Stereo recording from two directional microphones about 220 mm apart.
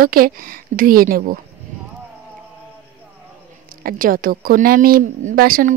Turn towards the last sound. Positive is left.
turn(degrees=-40)  # may be behind; listen again after turning